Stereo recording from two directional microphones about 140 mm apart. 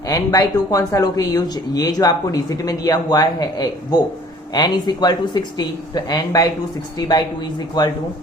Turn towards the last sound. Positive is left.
turn(degrees=30)  # may be behind; listen again after turning